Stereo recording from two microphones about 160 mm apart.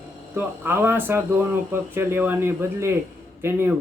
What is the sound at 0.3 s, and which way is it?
Speech, 10° right (ahead or behind).